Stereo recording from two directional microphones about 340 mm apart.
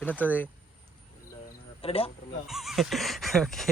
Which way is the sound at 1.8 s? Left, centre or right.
Centre.